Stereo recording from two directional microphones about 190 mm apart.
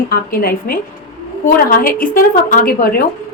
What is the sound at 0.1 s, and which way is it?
A woman's voice, 50° left (ahead or behind).